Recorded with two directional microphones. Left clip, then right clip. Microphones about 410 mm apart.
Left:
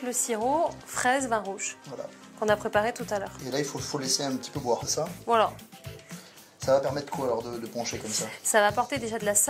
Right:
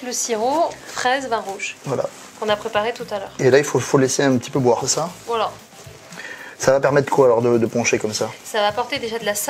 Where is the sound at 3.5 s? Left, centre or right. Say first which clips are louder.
Right 14 dB; right.